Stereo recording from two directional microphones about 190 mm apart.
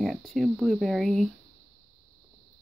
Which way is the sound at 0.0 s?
Centre (ahead or behind).